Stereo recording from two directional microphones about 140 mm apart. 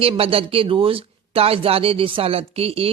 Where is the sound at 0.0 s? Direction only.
40° right (ahead or behind).